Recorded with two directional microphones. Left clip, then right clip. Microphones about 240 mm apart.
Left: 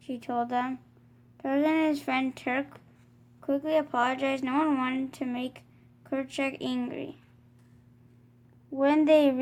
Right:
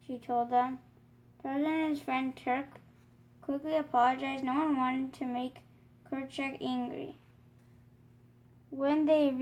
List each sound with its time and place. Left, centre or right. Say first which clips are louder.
0.0 s a woman's voice: left 1 dB; left
8.8 s speech: left 6 dB; left